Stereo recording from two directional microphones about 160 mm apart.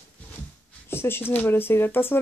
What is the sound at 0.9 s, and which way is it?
Speech, 15° left (ahead or behind).